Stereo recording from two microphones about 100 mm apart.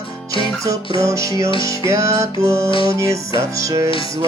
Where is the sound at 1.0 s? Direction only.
30° right (ahead or behind).